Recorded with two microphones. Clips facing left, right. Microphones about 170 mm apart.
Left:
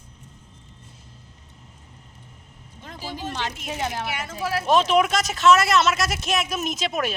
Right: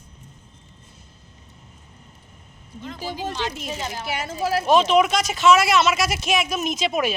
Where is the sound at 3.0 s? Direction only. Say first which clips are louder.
Right 3 dB; 45° right (ahead or behind).